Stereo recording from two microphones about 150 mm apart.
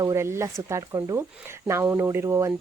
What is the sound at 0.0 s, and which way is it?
Speech, 20° right (ahead or behind).